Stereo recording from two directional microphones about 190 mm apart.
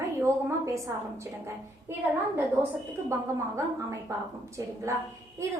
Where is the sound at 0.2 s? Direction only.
15° right (ahead or behind).